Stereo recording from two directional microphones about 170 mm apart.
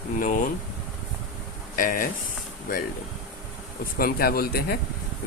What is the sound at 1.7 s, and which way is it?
Speech, 55° left (ahead or behind).